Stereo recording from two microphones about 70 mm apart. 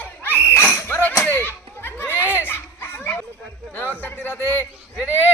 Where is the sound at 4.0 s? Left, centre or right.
Left.